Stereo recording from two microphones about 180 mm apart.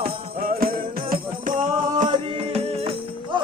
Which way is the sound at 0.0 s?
55° right (ahead or behind).